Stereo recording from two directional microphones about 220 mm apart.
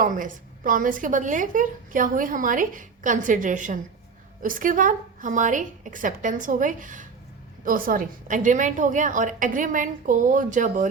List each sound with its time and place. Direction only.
0.0 s a woman's voice: 35° right (ahead or behind)